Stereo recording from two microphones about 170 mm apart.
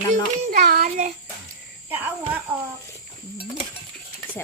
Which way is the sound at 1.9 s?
10° right (ahead or behind).